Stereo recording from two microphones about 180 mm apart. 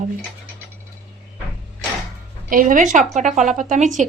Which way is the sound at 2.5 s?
50° right (ahead or behind).